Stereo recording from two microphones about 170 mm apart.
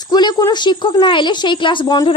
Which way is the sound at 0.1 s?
25° left (ahead or behind).